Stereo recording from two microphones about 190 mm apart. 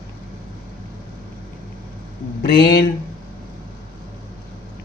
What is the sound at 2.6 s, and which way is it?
Speech, 55° left (ahead or behind).